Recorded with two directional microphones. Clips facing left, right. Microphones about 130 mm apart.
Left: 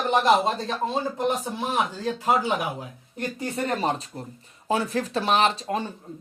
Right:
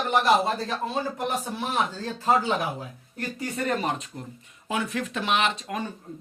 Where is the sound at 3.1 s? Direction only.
25° left (ahead or behind).